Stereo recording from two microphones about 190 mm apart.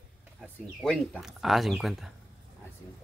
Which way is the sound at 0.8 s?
Centre (ahead or behind).